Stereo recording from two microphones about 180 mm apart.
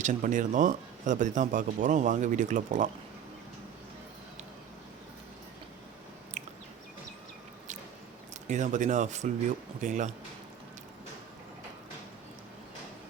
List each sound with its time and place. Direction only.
0.0 s speech: 45° right (ahead or behind)
6.4 s a sound: 45° right (ahead or behind)
8.4 s speech: 45° right (ahead or behind)